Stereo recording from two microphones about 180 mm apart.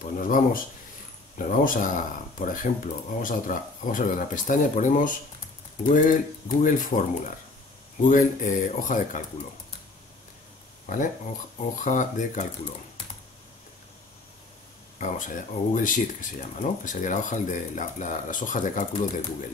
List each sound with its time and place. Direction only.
0.0 s speech: 50° left (ahead or behind)
11.7 s speech: 45° left (ahead or behind)
15.0 s speech: 45° left (ahead or behind)